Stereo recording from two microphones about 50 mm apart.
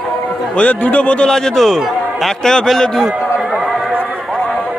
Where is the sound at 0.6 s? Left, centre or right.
Left.